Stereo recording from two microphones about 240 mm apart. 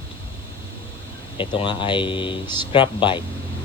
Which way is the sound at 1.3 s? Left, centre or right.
Centre.